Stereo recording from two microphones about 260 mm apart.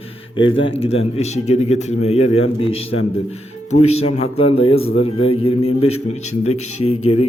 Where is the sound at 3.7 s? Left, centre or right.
Left.